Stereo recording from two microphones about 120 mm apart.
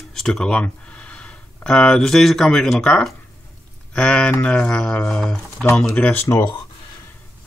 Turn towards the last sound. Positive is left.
turn(degrees=25)  # may be behind; listen again after turning